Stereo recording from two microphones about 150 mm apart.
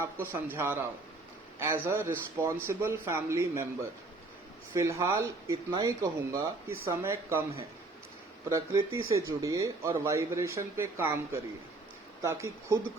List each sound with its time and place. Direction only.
0.0 s speech: 15° right (ahead or behind)
8.4 s speech: 20° right (ahead or behind)